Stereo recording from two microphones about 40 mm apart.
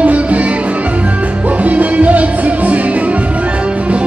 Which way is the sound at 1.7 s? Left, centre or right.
Right.